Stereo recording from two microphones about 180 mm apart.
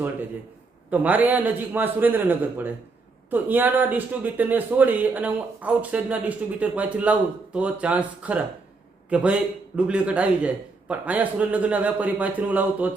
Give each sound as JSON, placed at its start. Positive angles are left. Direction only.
{"t": 0.9, "sound": "a man's voice", "side_deg": -10}